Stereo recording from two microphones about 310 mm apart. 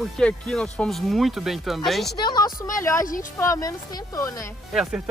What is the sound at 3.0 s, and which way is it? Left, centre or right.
Speech, left.